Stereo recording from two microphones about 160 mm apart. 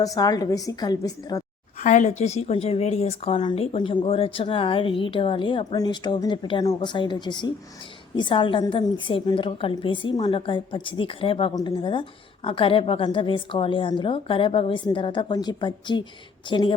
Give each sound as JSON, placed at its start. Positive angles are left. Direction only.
{"t": 0.0, "sound": "a woman's voice", "side_deg": 25}
{"t": 1.8, "sound": "a woman's voice", "side_deg": 50}